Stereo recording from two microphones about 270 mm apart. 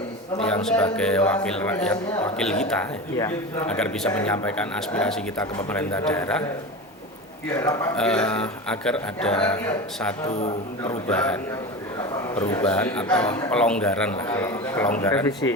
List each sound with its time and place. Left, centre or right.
0.3 s speech: centre
7.5 s speech: centre
7.9 s speech: centre
10.2 s a man's voice: left
10.8 s speech: centre
12.4 s speech: centre